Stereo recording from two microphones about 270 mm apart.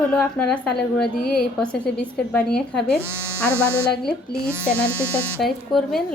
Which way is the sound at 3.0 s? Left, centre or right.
Centre.